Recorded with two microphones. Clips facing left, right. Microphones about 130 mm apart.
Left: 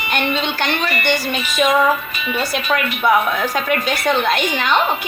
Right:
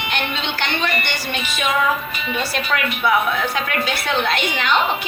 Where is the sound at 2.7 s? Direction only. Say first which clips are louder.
Left 3 dB; 40° left (ahead or behind).